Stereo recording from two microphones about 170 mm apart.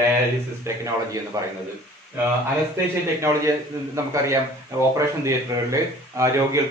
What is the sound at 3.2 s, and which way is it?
A man's voice, 15° right (ahead or behind).